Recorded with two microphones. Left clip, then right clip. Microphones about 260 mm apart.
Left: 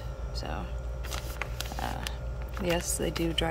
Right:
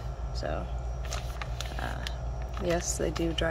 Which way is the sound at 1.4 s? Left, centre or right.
Centre.